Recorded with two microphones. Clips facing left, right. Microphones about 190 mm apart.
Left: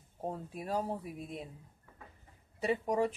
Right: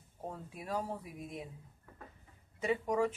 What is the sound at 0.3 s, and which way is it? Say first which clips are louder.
Speech: left 3 dB; 35° left (ahead or behind).